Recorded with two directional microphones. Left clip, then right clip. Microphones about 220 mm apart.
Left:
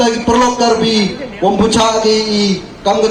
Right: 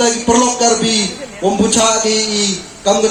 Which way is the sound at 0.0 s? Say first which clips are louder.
Left 1 dB; 35° left (ahead or behind).